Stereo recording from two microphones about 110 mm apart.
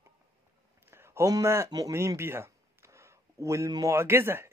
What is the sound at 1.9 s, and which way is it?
Speech, 25° right (ahead or behind).